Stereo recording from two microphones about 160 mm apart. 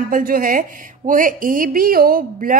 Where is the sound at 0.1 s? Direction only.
60° right (ahead or behind).